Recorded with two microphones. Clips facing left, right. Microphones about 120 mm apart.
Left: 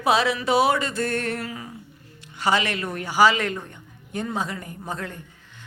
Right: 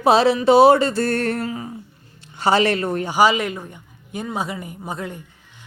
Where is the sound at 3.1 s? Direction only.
15° right (ahead or behind).